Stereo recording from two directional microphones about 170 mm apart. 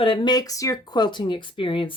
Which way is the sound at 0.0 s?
30° left (ahead or behind).